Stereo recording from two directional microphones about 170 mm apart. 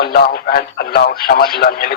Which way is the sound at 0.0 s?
60° left (ahead or behind).